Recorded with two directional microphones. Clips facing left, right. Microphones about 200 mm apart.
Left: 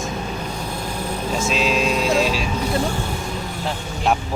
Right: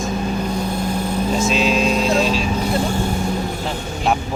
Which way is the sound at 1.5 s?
Centre (ahead or behind).